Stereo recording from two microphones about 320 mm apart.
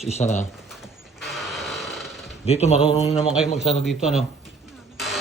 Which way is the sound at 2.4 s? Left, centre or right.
Centre.